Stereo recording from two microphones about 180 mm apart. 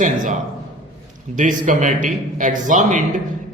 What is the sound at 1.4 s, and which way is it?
Speech, 45° right (ahead or behind).